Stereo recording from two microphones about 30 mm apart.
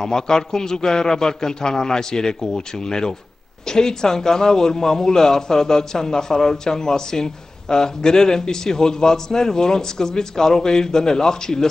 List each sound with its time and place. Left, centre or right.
0.0 s a man's voice: centre